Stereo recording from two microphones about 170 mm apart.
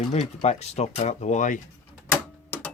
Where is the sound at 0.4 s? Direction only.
40° left (ahead or behind).